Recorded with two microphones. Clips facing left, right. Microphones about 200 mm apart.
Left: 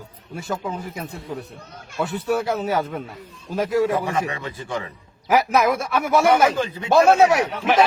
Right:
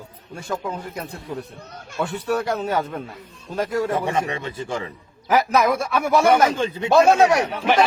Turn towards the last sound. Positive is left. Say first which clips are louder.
# even
turn(degrees=0)  # may be behind; listen again after turning